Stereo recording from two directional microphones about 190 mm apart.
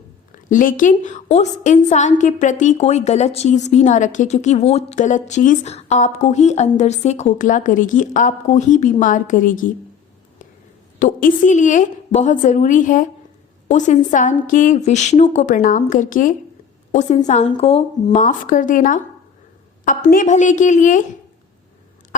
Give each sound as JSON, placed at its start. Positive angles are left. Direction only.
{"t": 0.4, "sound": "a woman's voice", "side_deg": 45}
{"t": 11.0, "sound": "a woman's voice", "side_deg": 40}